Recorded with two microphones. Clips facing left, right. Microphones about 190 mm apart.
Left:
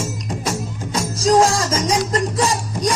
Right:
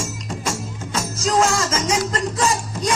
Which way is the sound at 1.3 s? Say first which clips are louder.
Left 2 dB; 35° left (ahead or behind).